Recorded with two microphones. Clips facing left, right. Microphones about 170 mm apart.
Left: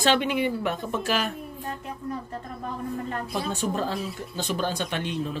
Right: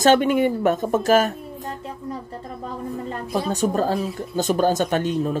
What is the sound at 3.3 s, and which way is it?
Speech, 40° right (ahead or behind).